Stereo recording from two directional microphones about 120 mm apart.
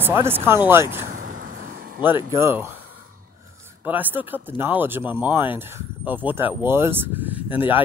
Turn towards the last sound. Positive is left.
turn(degrees=-15)  # may be behind; listen again after turning